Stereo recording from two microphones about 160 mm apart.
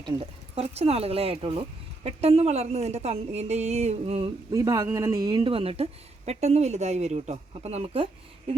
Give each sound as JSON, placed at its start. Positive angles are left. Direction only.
{"t": 0.0, "sound": "speech", "side_deg": -40}
{"t": 4.5, "sound": "speech", "side_deg": -20}